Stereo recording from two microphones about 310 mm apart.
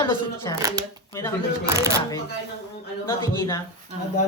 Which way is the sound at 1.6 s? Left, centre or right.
Centre.